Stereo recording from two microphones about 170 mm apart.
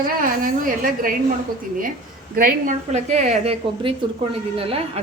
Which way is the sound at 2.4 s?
60° right (ahead or behind).